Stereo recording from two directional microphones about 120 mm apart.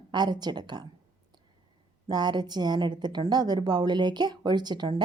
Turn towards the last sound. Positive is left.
turn(degrees=-40)  # may be behind; listen again after turning